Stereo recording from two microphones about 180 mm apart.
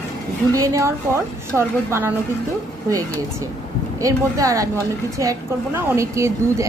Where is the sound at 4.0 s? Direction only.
20° right (ahead or behind).